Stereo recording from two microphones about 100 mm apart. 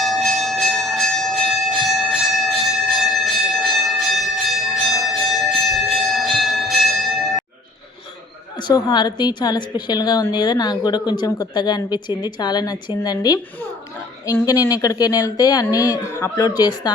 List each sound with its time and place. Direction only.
0.0 s bell: centre (ahead or behind)
8.5 s a woman's voice: 45° left (ahead or behind)
14.4 s speech: 35° left (ahead or behind)
16.3 s speech: 40° left (ahead or behind)